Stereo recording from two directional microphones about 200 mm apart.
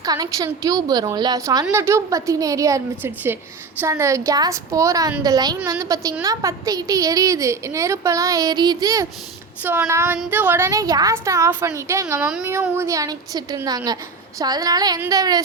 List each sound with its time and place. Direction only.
0.0 s a woman's voice: 20° right (ahead or behind)